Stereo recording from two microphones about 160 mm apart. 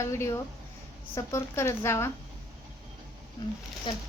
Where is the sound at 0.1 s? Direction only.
15° left (ahead or behind).